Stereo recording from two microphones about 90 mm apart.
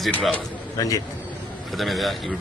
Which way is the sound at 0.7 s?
40° left (ahead or behind).